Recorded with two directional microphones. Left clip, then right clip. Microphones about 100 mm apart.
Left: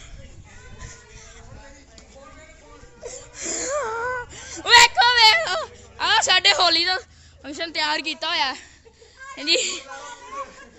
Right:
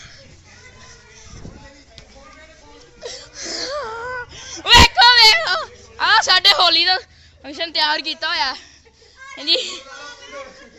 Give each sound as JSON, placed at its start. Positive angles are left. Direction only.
{"t": 3.0, "sound": "laughter", "side_deg": 15}
{"t": 3.3, "sound": "throat clearing", "side_deg": 40}
{"t": 3.7, "sound": "wheeze", "side_deg": 50}
{"t": 4.2, "sound": "whimper", "side_deg": 30}
{"t": 4.7, "sound": "a sound", "side_deg": 10}
{"t": 5.1, "sound": "a sound", "side_deg": 35}
{"t": 6.0, "sound": "a sound", "side_deg": 25}
{"t": 6.9, "sound": "a woman's voice", "side_deg": 15}
{"t": 8.2, "sound": "a woman's voice", "side_deg": 50}